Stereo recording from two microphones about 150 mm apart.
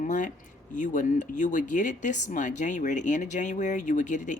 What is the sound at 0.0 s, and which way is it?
Speech, 60° left (ahead or behind).